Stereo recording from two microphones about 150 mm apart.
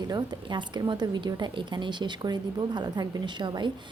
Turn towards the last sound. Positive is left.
turn(degrees=-30)  # may be behind; listen again after turning